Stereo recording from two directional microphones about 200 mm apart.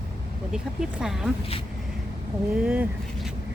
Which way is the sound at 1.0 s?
Centre (ahead or behind).